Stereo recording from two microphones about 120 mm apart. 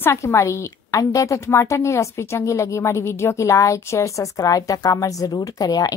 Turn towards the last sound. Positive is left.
turn(degrees=35)  # may be behind; listen again after turning